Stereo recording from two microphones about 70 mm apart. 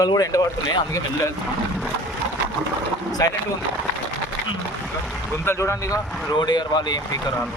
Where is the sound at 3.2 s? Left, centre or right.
Left.